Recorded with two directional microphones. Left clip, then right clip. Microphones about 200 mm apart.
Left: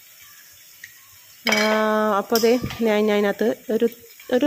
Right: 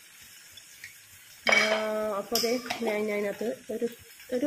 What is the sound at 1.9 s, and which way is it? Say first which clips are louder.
Speech: left 10 dB; 45° left (ahead or behind).